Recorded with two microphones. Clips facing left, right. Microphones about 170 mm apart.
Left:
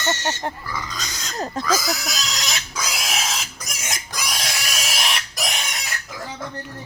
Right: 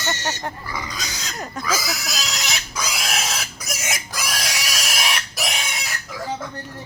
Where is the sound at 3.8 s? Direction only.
Centre (ahead or behind).